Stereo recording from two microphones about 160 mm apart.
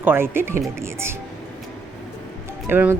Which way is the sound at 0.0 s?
15° right (ahead or behind).